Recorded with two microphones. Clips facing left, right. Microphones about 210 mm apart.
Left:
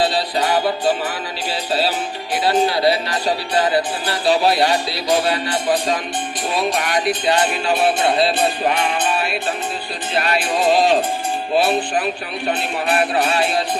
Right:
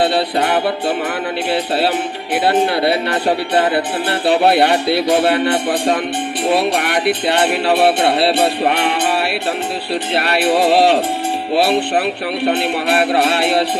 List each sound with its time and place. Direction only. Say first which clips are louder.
0.0 s speech: right 3 dB; 60° right (ahead or behind)
6.5 s music: right 4 dB; 60° right (ahead or behind)